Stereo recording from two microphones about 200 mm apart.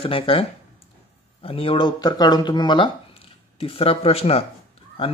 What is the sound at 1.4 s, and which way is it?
Speech, 25° left (ahead or behind).